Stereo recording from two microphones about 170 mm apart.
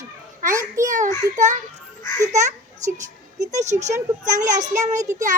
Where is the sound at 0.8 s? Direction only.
45° right (ahead or behind).